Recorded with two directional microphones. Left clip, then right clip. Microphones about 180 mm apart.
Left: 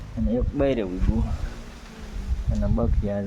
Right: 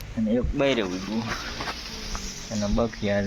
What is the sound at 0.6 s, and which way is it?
Speech, 35° left (ahead or behind).